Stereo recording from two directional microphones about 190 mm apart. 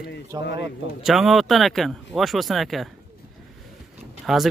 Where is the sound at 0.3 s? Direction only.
20° right (ahead or behind).